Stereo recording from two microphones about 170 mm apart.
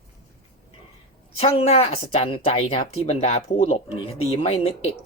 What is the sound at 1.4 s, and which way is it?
Speech, 35° left (ahead or behind).